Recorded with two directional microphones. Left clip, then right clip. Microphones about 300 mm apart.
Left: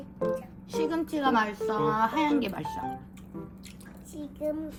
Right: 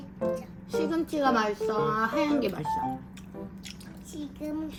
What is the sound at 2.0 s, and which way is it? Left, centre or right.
Speech, left.